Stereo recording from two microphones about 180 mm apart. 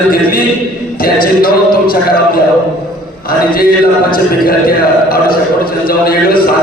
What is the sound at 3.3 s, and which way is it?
Mantra, 55° left (ahead or behind).